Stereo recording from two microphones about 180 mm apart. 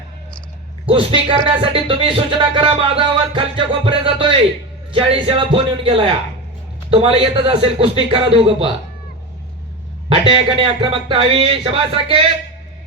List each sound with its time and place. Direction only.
0.9 s speech: 30° right (ahead or behind)
10.2 s speech: 30° right (ahead or behind)